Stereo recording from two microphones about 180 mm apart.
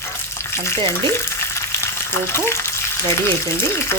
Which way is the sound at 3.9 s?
15° left (ahead or behind).